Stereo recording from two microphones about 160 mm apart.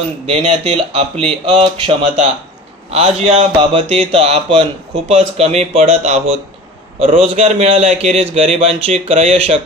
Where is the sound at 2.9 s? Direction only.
40° right (ahead or behind).